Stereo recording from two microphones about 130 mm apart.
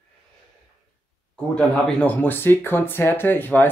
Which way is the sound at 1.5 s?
10° left (ahead or behind).